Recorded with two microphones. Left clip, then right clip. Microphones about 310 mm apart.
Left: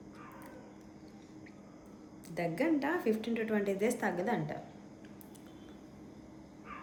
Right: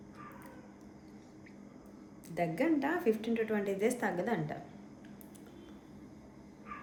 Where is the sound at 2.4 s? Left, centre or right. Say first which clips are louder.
Right 1 dB; centre.